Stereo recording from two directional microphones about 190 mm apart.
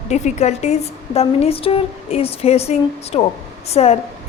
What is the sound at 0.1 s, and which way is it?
A woman's voice, 35° left (ahead or behind).